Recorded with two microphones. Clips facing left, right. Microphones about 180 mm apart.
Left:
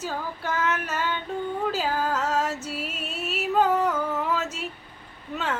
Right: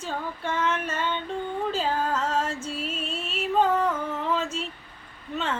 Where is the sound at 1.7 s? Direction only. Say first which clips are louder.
Right 2 dB; 5° left (ahead or behind).